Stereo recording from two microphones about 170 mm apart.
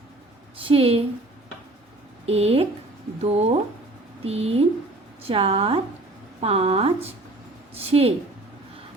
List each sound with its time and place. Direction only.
0.6 s speech: 35° right (ahead or behind)
2.2 s speech: 35° right (ahead or behind)